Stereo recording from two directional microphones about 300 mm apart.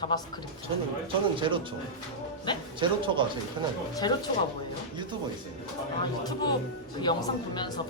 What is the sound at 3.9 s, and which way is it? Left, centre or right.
Speech, centre.